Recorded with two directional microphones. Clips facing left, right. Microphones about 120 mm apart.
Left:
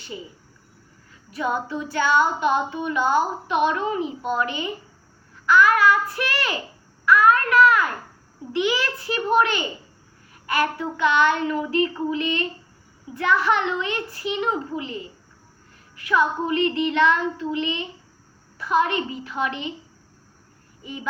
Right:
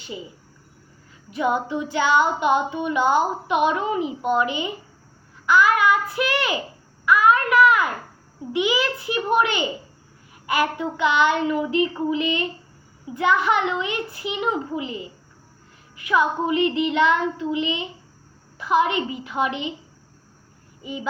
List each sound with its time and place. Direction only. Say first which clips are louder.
1.4 s child singing: right 3 dB; 15° right (ahead or behind)
7.0 s a sound: even; 10° right (ahead or behind)
8.5 s child singing: right 1 dB; 10° right (ahead or behind)
20.8 s child singing: right 3 dB; 10° right (ahead or behind)